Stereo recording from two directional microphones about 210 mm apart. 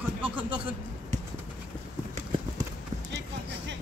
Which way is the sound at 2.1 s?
25° right (ahead or behind).